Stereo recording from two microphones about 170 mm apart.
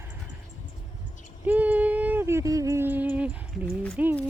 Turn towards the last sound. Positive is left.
turn(degrees=0)  # may be behind; listen again after turning